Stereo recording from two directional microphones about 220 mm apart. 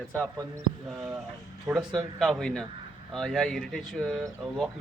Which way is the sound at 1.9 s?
Centre (ahead or behind).